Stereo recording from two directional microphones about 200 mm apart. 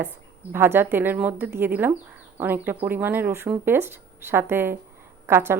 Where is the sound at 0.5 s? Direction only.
10° right (ahead or behind).